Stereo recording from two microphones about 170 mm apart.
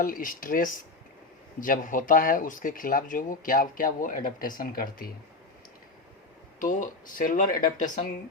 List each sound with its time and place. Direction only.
0.0 s speech: 55° left (ahead or behind)
6.6 s speech: 50° left (ahead or behind)